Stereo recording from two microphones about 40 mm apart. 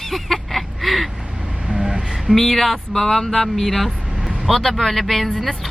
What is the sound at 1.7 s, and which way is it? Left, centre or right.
Vehicle, centre.